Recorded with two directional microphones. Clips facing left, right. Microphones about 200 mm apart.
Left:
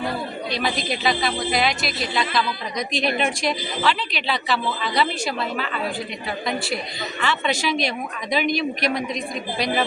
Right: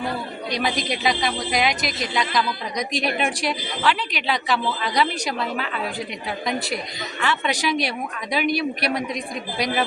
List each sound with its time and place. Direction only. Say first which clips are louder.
0.5 s a woman's voice: right 1 dB; 15° right (ahead or behind)